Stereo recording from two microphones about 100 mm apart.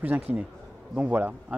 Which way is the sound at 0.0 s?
20° right (ahead or behind).